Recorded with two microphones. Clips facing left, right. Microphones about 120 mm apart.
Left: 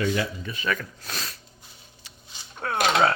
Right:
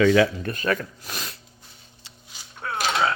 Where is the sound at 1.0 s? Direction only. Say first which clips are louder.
Even; 15° right (ahead or behind).